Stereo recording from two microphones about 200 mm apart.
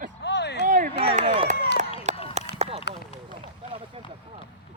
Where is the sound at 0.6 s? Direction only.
45° right (ahead or behind).